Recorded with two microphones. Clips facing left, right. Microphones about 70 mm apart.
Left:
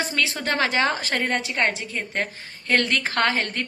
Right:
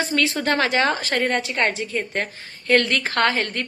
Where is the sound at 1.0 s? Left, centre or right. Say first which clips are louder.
Right 3 dB; centre.